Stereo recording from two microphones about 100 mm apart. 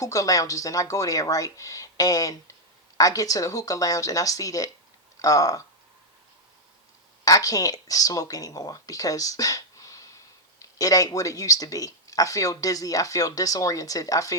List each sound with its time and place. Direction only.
0.0 s speech: 35° left (ahead or behind)
7.3 s speech: 35° left (ahead or behind)